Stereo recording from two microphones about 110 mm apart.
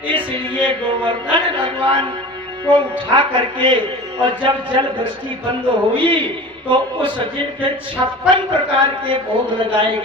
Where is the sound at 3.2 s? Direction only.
45° right (ahead or behind).